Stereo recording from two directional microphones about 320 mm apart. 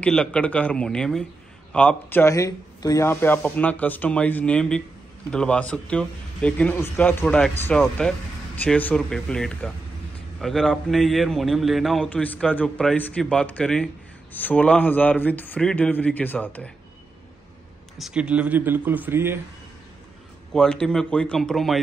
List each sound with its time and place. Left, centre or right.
0.0 s a man's voice: centre
17.9 s a man's voice: centre
20.5 s a man's voice: centre